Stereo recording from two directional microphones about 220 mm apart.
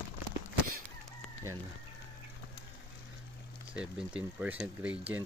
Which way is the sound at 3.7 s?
5° right (ahead or behind).